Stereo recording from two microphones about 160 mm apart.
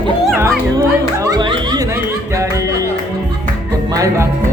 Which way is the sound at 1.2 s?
25° right (ahead or behind).